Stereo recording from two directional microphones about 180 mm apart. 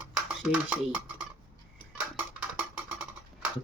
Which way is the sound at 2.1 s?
10° right (ahead or behind).